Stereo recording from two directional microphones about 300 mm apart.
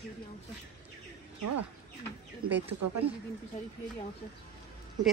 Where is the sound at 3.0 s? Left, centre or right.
Centre.